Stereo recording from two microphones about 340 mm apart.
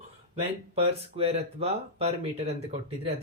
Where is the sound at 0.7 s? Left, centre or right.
Centre.